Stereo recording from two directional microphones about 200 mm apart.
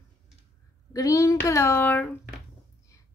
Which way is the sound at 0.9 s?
15° left (ahead or behind).